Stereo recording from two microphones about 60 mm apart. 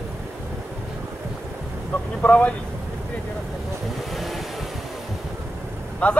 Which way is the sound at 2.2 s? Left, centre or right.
Left.